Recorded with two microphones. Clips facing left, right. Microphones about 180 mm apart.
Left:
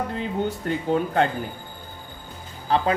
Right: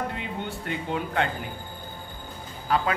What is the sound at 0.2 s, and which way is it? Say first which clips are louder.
Speech: left 7 dB; 40° left (ahead or behind).